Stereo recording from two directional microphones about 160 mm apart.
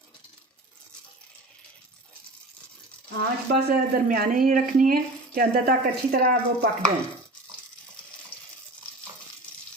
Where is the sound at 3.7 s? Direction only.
60° right (ahead or behind).